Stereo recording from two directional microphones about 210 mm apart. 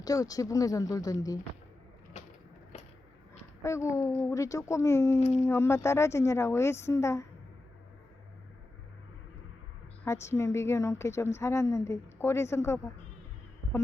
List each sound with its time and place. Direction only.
0.0 s a woman's voice: 15° left (ahead or behind)
2.2 s mechanisms: 30° left (ahead or behind)
2.7 s a sound: 30° left (ahead or behind)
3.6 s a woman's voice: 15° left (ahead or behind)
10.0 s a woman's voice: 15° left (ahead or behind)